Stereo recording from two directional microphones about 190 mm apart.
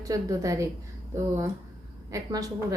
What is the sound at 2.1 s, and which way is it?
Speech, 20° right (ahead or behind).